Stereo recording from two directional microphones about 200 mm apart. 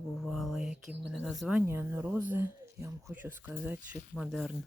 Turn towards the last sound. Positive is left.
turn(degrees=0)  # may be behind; listen again after turning